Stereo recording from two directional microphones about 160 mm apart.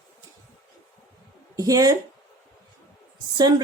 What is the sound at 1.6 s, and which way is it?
Speech, 20° right (ahead or behind).